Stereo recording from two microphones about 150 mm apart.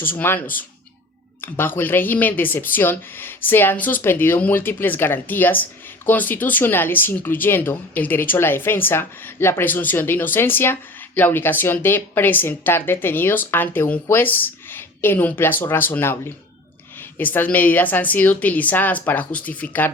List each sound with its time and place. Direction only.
0.2 s speech: 15° left (ahead or behind)